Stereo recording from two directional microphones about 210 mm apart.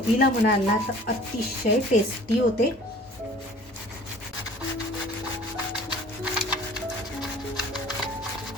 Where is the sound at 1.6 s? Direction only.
35° left (ahead or behind).